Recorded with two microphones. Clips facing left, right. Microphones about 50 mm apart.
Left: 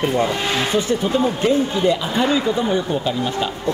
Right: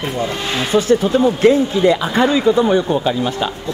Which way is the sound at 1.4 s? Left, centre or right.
Right.